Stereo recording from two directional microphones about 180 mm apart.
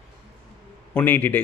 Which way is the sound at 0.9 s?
10° left (ahead or behind).